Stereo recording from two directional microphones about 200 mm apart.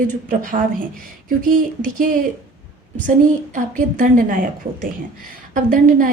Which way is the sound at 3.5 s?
40° right (ahead or behind).